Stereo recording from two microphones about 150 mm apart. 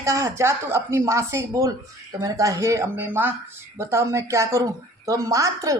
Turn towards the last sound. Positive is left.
turn(degrees=-20)  # may be behind; listen again after turning